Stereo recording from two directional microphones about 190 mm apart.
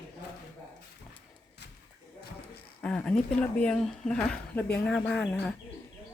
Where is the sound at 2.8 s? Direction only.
5° left (ahead or behind).